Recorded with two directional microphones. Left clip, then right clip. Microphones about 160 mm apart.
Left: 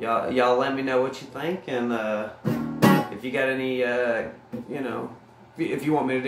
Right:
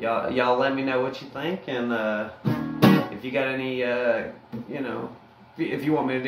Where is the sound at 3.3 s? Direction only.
20° left (ahead or behind).